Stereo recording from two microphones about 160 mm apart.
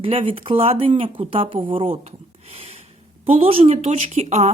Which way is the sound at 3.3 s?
35° right (ahead or behind).